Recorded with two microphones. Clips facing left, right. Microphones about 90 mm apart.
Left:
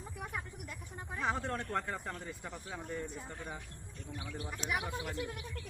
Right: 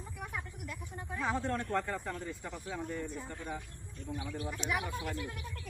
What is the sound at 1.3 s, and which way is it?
Speech, 15° left (ahead or behind).